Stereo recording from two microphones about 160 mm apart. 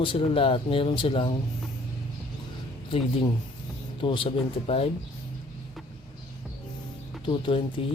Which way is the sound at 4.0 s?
30° left (ahead or behind).